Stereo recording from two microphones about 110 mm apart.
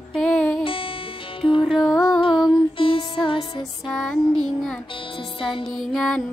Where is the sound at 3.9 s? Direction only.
5° left (ahead or behind).